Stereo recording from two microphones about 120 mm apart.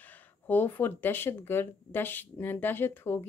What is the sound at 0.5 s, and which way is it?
Speech, 15° left (ahead or behind).